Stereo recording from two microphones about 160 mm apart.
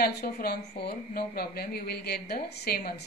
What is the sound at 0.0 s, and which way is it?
A woman's voice, 80° left.